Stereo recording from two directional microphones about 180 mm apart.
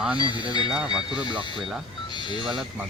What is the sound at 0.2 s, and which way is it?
Speech, 25° left (ahead or behind).